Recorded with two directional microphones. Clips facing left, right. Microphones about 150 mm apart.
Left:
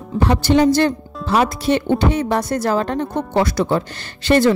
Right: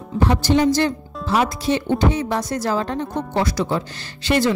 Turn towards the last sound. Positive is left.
turn(degrees=55)  # may be behind; listen again after turning